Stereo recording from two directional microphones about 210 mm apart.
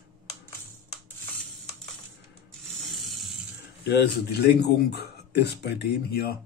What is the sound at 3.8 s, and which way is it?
Speech, 50° left (ahead or behind).